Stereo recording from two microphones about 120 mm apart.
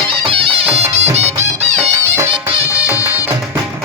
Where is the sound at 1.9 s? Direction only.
25° right (ahead or behind).